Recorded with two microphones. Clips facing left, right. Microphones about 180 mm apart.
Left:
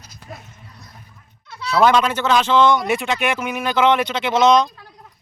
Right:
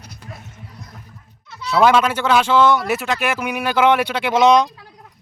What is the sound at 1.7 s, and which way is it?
A man's voice, 5° right (ahead or behind).